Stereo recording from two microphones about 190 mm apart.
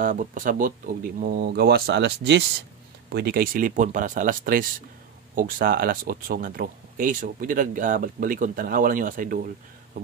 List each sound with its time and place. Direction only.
0.0 s speech: 45° right (ahead or behind)